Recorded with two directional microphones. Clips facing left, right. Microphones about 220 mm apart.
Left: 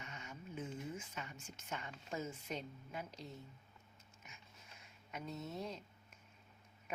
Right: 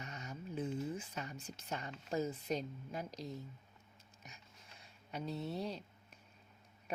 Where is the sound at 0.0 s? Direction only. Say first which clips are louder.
Right 4 dB; 40° right (ahead or behind).